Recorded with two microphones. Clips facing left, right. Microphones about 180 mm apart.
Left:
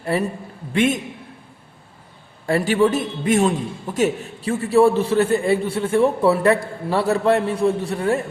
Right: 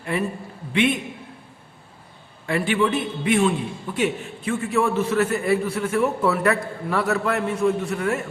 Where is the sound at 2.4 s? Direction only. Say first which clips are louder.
Left 4 dB; 40° left (ahead or behind).